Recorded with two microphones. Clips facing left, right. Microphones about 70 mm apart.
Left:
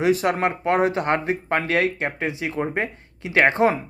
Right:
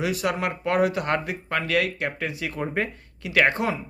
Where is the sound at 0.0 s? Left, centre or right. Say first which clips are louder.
Left 6 dB; left.